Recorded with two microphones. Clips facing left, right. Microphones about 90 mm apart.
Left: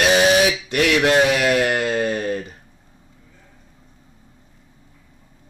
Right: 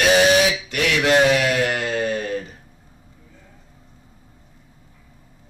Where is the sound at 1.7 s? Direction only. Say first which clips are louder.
Left 2 dB; 30° left (ahead or behind).